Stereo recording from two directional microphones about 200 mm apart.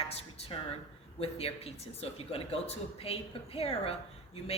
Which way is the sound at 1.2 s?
30° left (ahead or behind).